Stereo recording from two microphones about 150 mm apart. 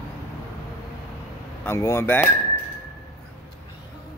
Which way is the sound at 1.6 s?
15° left (ahead or behind).